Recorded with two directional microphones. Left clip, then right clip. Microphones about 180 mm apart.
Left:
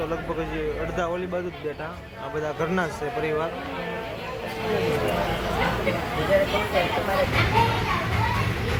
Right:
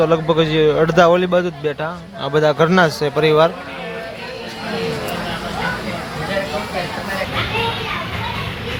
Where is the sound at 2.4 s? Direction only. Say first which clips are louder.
Right 13 dB; 55° right (ahead or behind).